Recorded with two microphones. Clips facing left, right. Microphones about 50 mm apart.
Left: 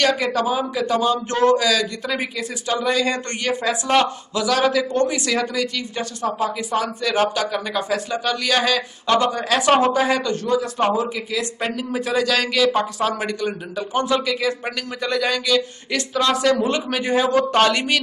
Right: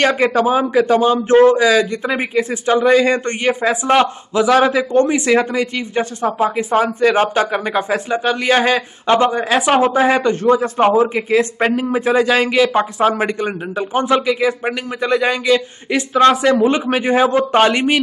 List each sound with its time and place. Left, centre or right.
0.0 s a man's voice: right; by 10.0 s centre
10.0 s a man's voice: right